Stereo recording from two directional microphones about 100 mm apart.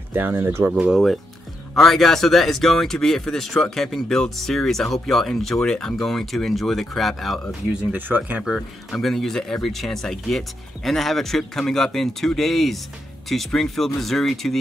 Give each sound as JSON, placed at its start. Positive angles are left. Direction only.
{"t": 0.1, "sound": "speech", "side_deg": -20}
{"t": 0.7, "sound": "speech", "side_deg": -5}
{"t": 7.7, "sound": "speech", "side_deg": -15}
{"t": 8.5, "sound": "speech", "side_deg": 5}